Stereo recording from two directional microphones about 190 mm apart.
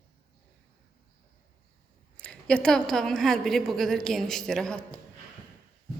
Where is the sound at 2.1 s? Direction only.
5° left (ahead or behind).